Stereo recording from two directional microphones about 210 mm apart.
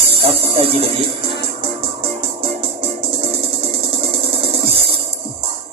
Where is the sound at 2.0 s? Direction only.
25° right (ahead or behind).